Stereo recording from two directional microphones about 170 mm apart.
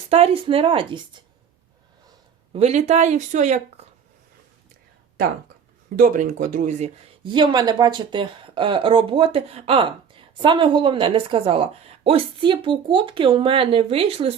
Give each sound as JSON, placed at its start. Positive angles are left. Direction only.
{"t": 0.1, "sound": "speech", "side_deg": -35}
{"t": 2.5, "sound": "speech", "side_deg": -40}
{"t": 6.0, "sound": "speech", "side_deg": -50}
{"t": 7.3, "sound": "speech", "side_deg": -25}